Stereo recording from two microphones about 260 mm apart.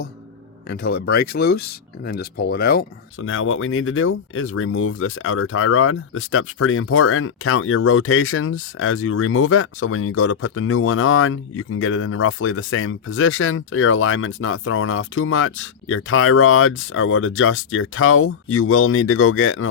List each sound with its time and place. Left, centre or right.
0.7 s speech: left
3.2 s speech: left